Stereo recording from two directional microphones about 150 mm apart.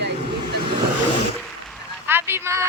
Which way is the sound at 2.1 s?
15° right (ahead or behind).